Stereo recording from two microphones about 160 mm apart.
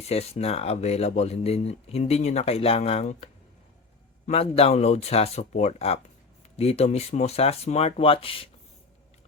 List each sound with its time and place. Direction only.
0.0 s speech: 40° left (ahead or behind)
4.3 s speech: 40° left (ahead or behind)